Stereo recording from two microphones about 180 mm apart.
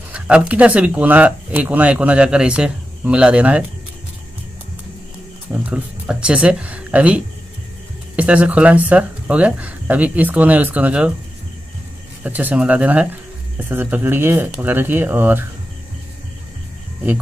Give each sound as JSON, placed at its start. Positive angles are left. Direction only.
{"t": 0.1, "sound": "speech", "side_deg": -5}
{"t": 5.5, "sound": "speech", "side_deg": -5}
{"t": 12.2, "sound": "speech", "side_deg": -10}